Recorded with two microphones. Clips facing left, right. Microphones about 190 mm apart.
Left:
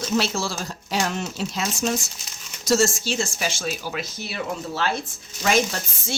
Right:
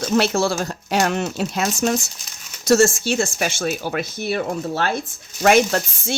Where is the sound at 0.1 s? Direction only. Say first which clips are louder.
Right 6 dB; 60° right (ahead or behind).